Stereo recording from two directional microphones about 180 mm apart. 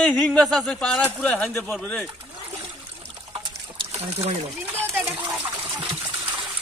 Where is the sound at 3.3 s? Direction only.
30° right (ahead or behind).